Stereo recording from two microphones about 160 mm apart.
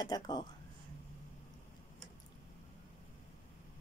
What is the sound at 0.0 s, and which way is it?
Speech, 25° left (ahead or behind).